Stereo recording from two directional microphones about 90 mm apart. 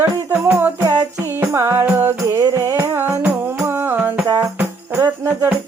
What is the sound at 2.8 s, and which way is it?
Music, 25° right (ahead or behind).